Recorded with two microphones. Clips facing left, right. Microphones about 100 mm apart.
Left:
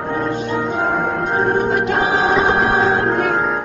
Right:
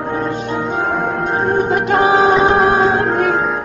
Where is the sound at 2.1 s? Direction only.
Centre (ahead or behind).